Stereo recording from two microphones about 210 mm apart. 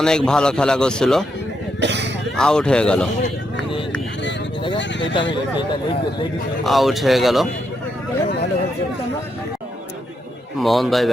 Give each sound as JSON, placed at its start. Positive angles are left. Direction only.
{"t": 0.0, "sound": "speech", "side_deg": 5}
{"t": 1.8, "sound": "speech", "side_deg": -55}
{"t": 2.3, "sound": "speech", "side_deg": 5}
{"t": 4.8, "sound": "horse", "side_deg": 55}
{"t": 6.7, "sound": "speech", "side_deg": 0}
{"t": 10.6, "sound": "speech", "side_deg": 0}